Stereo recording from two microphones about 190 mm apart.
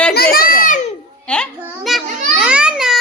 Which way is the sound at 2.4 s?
5° right (ahead or behind).